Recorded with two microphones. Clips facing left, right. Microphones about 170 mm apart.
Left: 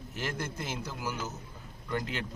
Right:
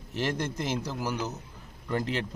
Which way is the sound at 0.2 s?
35° right (ahead or behind).